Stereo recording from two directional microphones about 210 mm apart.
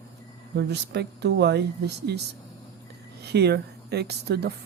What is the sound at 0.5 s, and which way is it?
A woman's voice, 55° right (ahead or behind).